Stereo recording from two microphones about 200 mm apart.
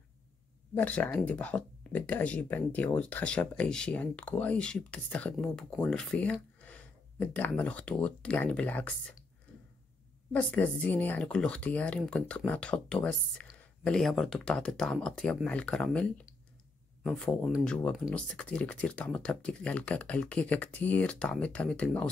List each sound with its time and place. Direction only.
0.7 s speech: 5° left (ahead or behind)
10.3 s speech: 10° left (ahead or behind)